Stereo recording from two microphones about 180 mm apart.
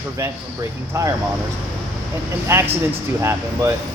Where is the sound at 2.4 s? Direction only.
15° right (ahead or behind).